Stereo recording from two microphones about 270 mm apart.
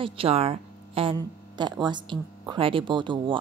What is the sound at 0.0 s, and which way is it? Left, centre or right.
Speech, right.